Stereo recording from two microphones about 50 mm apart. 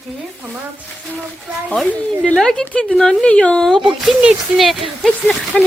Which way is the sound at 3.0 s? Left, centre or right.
Centre.